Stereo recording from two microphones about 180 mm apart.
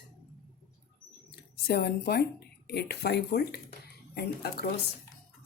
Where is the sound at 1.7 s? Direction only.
60° left (ahead or behind).